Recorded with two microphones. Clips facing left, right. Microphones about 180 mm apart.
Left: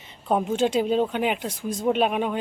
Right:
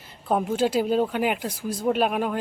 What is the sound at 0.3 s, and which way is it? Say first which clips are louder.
Speech: even; centre (ahead or behind).